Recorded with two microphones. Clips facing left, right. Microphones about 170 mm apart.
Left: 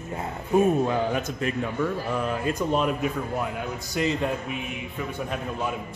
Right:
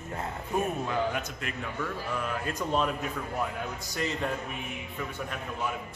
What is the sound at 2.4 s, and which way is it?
A woman's voice, 15° left (ahead or behind).